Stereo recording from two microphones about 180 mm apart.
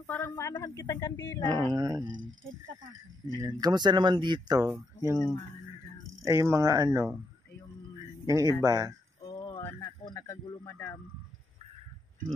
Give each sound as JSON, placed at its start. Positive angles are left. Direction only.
{"t": 0.0, "sound": "speech", "side_deg": 15}
{"t": 1.5, "sound": "speech", "side_deg": -25}
{"t": 2.1, "sound": "speech", "side_deg": -90}
{"t": 3.3, "sound": "speech", "side_deg": -20}
{"t": 6.2, "sound": "speech", "side_deg": -15}
{"t": 8.0, "sound": "a sound", "side_deg": -20}
{"t": 8.6, "sound": "speech", "side_deg": -20}
{"t": 9.6, "sound": "a sound", "side_deg": 15}
{"t": 10.0, "sound": "speech", "side_deg": 20}